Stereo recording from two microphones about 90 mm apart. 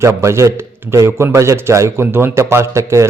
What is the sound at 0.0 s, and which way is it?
Speech, 30° right (ahead or behind).